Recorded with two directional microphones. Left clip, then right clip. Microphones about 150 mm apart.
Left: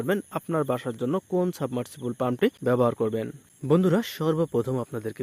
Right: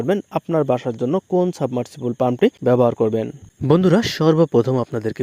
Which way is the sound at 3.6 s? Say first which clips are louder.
Right 7 dB; 55° right (ahead or behind).